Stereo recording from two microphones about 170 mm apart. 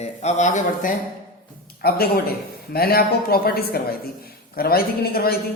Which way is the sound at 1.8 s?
65° left (ahead or behind).